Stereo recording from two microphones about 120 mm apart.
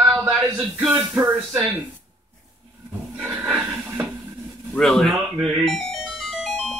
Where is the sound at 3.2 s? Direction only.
10° right (ahead or behind).